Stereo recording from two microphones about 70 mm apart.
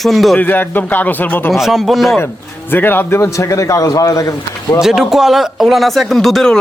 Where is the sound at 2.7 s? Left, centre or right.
Left.